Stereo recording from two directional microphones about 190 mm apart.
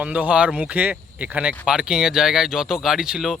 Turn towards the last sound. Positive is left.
turn(degrees=0)  # may be behind; listen again after turning